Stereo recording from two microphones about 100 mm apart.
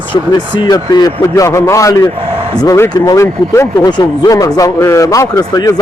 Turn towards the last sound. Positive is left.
turn(degrees=35)  # may be behind; listen again after turning